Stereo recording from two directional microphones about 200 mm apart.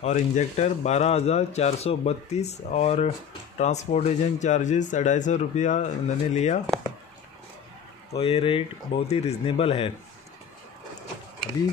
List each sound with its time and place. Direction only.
0.0 s speech: 35° left (ahead or behind)
8.2 s speech: 30° left (ahead or behind)